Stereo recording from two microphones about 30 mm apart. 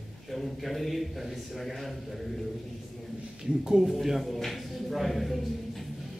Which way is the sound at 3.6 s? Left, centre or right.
Centre.